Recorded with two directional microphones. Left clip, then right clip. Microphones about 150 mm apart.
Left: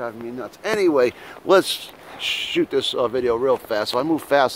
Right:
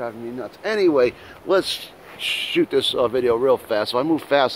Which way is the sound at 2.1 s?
5° left (ahead or behind).